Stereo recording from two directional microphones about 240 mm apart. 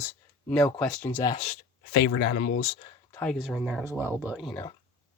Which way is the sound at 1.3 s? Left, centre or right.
Left.